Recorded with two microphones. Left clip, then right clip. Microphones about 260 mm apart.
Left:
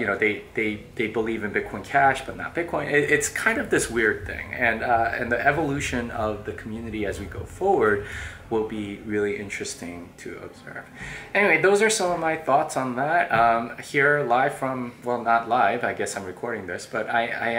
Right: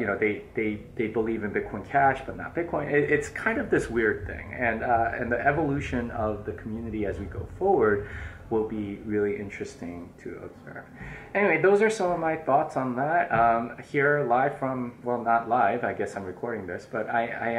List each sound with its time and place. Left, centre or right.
0.0 s speech: centre
6.1 s speech: right
6.4 s speech: centre
7.6 s speech: right
8.6 s speech: centre
11.3 s speech: centre